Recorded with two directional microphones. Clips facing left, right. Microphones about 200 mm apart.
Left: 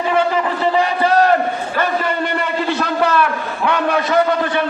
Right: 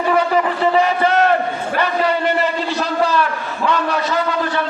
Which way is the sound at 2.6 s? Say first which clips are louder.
Left 1 dB; 60° left (ahead or behind).